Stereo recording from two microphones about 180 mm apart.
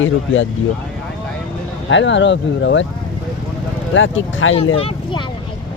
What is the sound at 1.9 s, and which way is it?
Speech, 90° left.